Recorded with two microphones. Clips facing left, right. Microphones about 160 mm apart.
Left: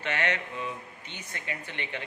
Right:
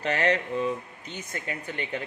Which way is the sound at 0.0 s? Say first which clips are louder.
Right 6 dB; 35° right (ahead or behind).